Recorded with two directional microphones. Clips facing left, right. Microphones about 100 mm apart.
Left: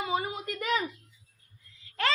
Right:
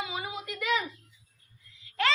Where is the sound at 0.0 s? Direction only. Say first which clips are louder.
Left 5 dB; 40° left (ahead or behind).